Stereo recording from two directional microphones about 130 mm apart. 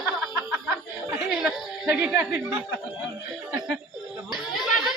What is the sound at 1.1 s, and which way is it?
Chuckle, centre (ahead or behind).